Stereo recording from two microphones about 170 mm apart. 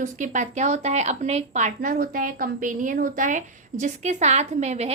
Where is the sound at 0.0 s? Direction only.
45° right (ahead or behind).